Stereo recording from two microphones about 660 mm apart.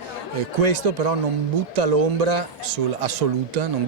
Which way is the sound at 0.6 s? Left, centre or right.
Right.